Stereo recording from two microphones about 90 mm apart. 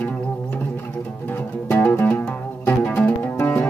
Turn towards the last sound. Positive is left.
turn(degrees=20)  # may be behind; listen again after turning